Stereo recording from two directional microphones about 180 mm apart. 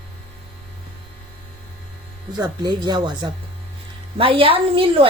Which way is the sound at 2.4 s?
25° right (ahead or behind).